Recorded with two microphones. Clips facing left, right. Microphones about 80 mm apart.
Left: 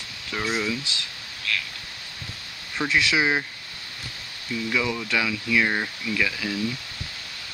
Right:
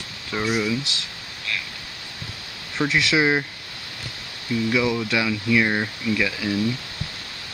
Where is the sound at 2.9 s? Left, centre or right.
Right.